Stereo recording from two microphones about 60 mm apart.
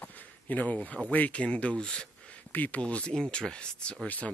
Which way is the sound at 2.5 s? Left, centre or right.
Left.